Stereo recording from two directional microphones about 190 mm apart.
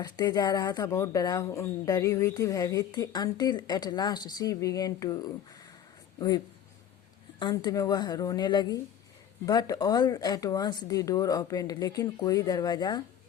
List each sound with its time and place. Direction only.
0.0 s speech: 20° left (ahead or behind)